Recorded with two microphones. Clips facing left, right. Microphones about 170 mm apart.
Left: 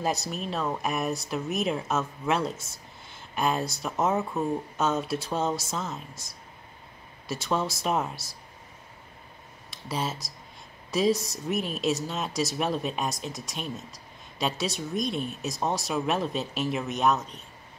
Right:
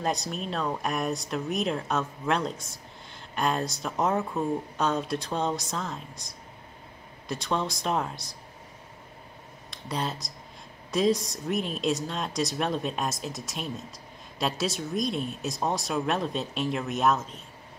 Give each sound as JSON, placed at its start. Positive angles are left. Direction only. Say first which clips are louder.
{"t": 0.0, "sound": "speech", "louder": "even", "side_deg": 5}
{"t": 7.2, "sound": "speech", "louder": "left 1 dB", "side_deg": 5}
{"t": 9.7, "sound": "speech", "louder": "even", "side_deg": 5}